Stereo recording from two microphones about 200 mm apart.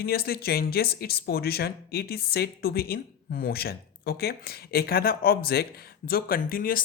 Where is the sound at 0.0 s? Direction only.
50° left (ahead or behind).